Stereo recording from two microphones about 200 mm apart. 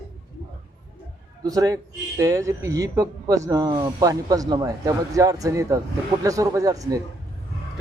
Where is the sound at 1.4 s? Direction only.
20° right (ahead or behind).